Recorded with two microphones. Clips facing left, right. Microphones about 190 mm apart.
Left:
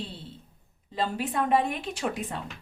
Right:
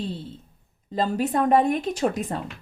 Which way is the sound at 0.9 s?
40° right (ahead or behind).